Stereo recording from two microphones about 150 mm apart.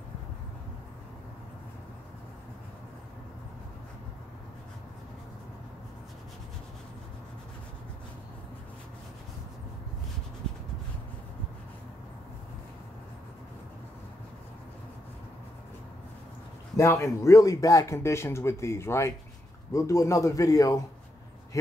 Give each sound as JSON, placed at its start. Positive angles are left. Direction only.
{"t": 16.7, "sound": "speech", "side_deg": 20}